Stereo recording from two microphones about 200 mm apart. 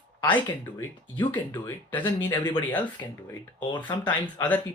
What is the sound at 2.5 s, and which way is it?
Speech, 10° left (ahead or behind).